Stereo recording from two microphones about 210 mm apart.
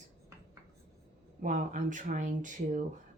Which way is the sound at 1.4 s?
35° right (ahead or behind).